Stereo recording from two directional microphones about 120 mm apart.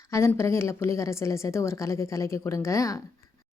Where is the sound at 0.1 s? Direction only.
20° left (ahead or behind).